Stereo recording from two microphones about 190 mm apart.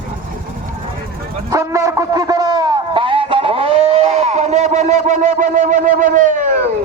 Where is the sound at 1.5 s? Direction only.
15° right (ahead or behind); by 6.6 s 40° right (ahead or behind).